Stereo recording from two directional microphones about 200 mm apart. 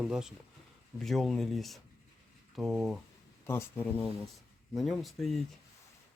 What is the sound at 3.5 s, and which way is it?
Speech, 10° left (ahead or behind).